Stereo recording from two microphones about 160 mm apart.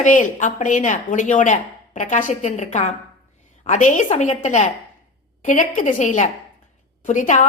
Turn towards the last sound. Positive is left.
turn(degrees=50)  # may be behind; listen again after turning